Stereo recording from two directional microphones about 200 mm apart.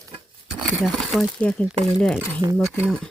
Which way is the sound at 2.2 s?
15° right (ahead or behind).